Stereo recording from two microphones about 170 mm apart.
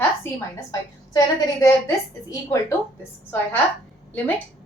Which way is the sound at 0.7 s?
20° left (ahead or behind).